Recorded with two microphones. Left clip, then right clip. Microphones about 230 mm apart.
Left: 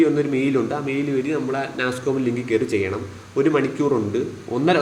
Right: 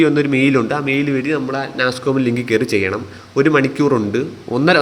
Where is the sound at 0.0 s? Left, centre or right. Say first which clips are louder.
Right 5 dB; right.